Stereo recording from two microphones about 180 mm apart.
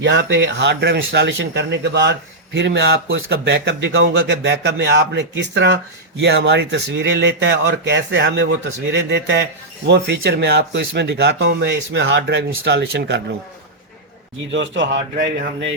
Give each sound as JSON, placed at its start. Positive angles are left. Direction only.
{"t": 0.0, "sound": "speech", "side_deg": -80}
{"t": 8.9, "sound": "speech", "side_deg": -75}
{"t": 14.5, "sound": "a man's voice", "side_deg": -90}
{"t": 15.1, "sound": "speech", "side_deg": -65}